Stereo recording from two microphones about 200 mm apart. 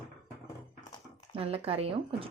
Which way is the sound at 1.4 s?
30° right (ahead or behind).